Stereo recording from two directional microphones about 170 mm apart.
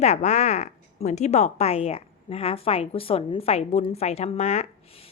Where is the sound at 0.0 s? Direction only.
40° left (ahead or behind).